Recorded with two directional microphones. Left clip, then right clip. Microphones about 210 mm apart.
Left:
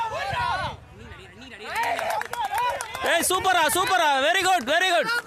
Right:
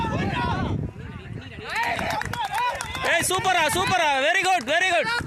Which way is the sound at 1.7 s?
55° left (ahead or behind).